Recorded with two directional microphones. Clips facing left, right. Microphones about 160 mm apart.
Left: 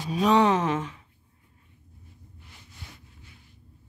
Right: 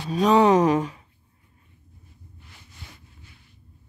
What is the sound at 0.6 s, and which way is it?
Speech, 40° right (ahead or behind).